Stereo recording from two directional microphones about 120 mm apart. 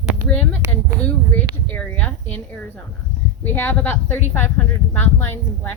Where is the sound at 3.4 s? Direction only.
15° left (ahead or behind).